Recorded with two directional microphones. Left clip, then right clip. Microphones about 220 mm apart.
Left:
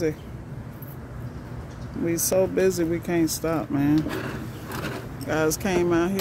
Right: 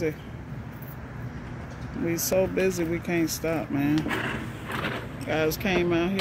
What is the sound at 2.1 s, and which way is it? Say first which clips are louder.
Speech: left 2 dB; 10° left (ahead or behind).